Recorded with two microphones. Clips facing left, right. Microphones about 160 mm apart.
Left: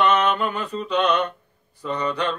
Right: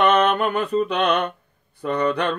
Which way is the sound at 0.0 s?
55° right (ahead or behind).